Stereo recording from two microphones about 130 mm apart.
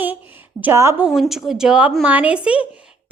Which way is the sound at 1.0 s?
5° right (ahead or behind).